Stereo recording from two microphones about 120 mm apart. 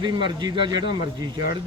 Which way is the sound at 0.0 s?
40° right (ahead or behind).